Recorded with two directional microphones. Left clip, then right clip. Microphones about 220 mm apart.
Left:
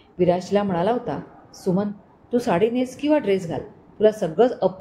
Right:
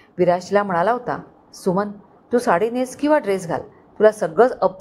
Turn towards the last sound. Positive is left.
turn(degrees=-20)  # may be behind; listen again after turning